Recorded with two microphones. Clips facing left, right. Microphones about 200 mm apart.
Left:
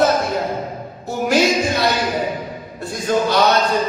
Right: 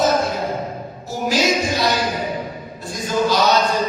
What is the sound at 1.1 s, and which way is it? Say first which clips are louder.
Music: left 3 dB; 60° left (ahead or behind).